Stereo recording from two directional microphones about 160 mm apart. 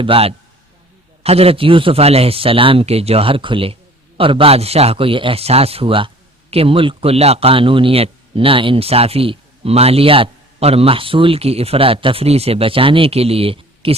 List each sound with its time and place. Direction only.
0.0 s speech: 35° right (ahead or behind)